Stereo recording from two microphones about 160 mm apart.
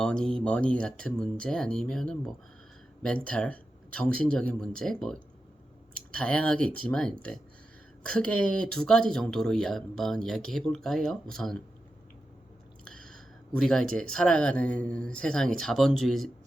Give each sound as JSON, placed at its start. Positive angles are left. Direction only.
{"t": 0.0, "sound": "speech", "side_deg": 5}
{"t": 12.8, "sound": "speech", "side_deg": 5}